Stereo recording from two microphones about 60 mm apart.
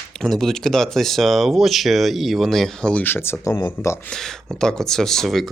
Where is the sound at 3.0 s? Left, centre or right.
Left.